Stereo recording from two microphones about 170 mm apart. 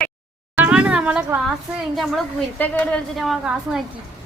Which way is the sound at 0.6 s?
10° right (ahead or behind).